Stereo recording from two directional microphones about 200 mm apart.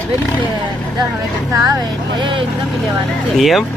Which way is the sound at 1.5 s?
15° right (ahead or behind).